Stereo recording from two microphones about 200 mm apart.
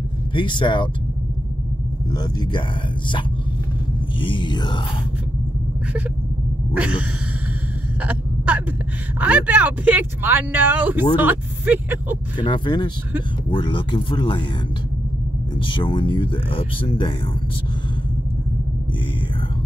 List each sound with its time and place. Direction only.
0.3 s speech: 25° left (ahead or behind)
2.1 s speech: 20° left (ahead or behind)
4.2 s speech: 25° left (ahead or behind)
6.7 s a sound: 5° right (ahead or behind)
9.2 s speech: 5° right (ahead or behind)
12.4 s speech: 25° left (ahead or behind)
15.5 s speech: 25° left (ahead or behind)